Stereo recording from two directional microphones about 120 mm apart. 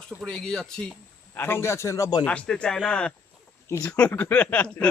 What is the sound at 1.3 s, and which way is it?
Speech, 20° left (ahead or behind).